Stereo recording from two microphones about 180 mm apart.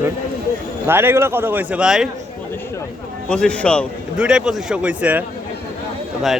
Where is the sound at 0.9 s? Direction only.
10° right (ahead or behind).